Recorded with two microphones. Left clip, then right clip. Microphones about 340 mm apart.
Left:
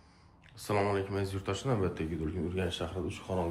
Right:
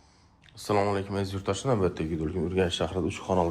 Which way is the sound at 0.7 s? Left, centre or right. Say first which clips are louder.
Right 4 dB; centre.